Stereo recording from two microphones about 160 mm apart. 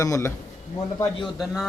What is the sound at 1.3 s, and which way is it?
Speech, 5° right (ahead or behind).